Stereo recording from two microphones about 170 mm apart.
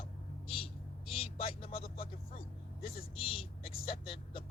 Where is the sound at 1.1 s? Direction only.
35° left (ahead or behind).